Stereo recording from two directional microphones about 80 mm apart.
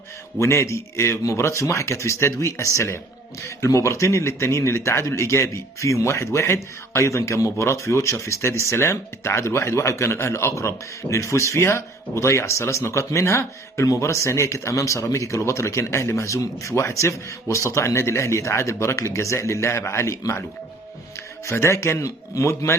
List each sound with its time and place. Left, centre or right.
0.3 s speech: left
21.4 s speech: left